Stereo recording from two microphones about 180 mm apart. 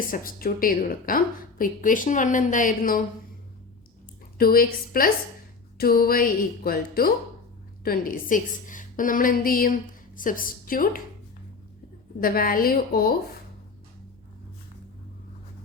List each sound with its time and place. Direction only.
0.0 s a woman's voice: 50° left (ahead or behind)
4.4 s a woman's voice: 55° left (ahead or behind)
12.2 s a woman's voice: 55° left (ahead or behind)